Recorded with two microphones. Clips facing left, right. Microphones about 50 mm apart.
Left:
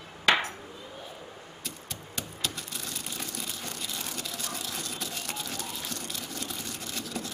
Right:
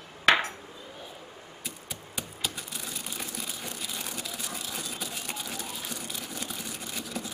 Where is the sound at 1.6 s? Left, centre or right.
Centre.